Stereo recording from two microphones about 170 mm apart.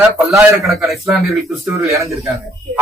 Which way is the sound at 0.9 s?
Centre (ahead or behind).